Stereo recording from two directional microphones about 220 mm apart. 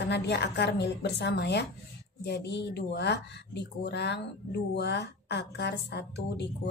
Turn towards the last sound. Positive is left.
turn(degrees=50)  # may be behind; listen again after turning